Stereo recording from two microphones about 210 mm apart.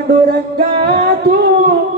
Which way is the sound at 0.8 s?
50° right (ahead or behind).